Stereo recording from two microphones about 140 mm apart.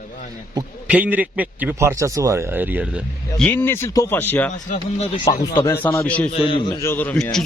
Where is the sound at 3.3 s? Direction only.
10° left (ahead or behind).